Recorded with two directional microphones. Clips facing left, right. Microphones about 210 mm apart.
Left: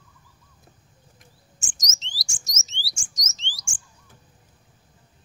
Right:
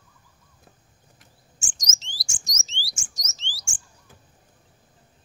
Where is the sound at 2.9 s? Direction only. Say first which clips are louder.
Even; 20° left (ahead or behind).